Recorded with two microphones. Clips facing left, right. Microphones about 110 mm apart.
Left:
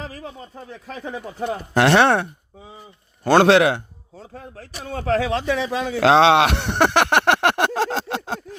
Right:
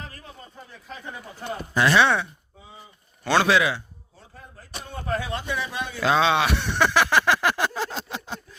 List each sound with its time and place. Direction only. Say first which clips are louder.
0.0 s speech: left 8 dB; 90° left; by 2.3 s 60° left (ahead or behind)
3.4 s a man's voice: left 7 dB; 65° left (ahead or behind); by 8.5 s 85° left